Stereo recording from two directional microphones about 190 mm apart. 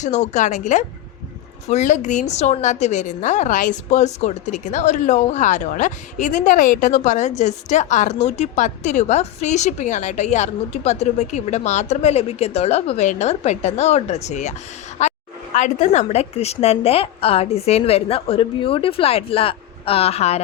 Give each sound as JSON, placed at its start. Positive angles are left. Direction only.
{"t": 0.0, "sound": "a woman's voice", "side_deg": 40}
{"t": 15.0, "sound": "a sound", "side_deg": 40}
{"t": 15.5, "sound": "a woman's voice", "side_deg": 40}